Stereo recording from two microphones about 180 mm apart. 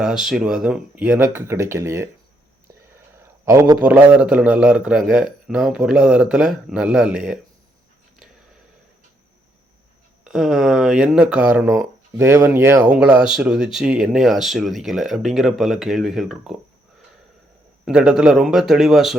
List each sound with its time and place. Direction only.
0.0 s speech: centre (ahead or behind)
3.2 s speech: 15° right (ahead or behind)
10.2 s speech: centre (ahead or behind)
17.8 s speech: 5° right (ahead or behind)